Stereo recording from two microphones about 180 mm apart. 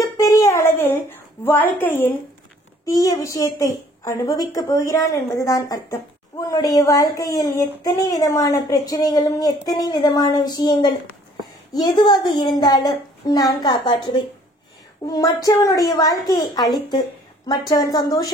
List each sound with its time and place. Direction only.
0.0 s a sound: 20° left (ahead or behind)
1.4 s a woman's voice: 10° left (ahead or behind)
15.0 s a woman's voice: 20° left (ahead or behind)